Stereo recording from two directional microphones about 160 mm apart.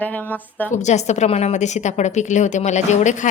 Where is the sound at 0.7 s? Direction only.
45° left (ahead or behind).